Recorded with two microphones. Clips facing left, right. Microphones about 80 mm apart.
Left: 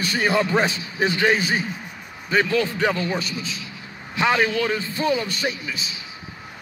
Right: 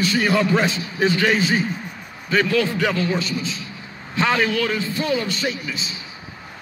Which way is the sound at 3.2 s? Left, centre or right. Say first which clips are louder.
Right 4 dB; right.